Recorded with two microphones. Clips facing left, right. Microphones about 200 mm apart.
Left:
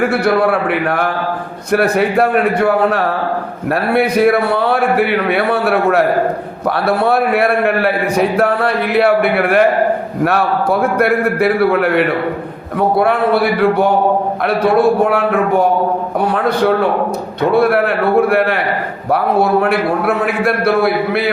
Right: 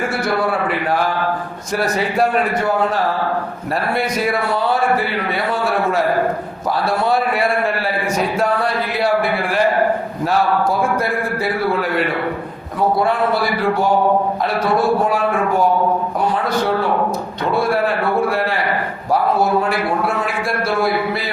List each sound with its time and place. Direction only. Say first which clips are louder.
0.0 s a man's voice: left 6 dB; 60° left (ahead or behind)